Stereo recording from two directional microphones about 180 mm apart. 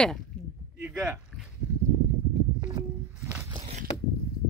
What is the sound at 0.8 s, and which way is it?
Speech, 5° right (ahead or behind).